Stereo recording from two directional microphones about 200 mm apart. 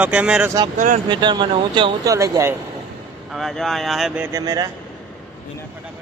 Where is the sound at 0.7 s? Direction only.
40° right (ahead or behind).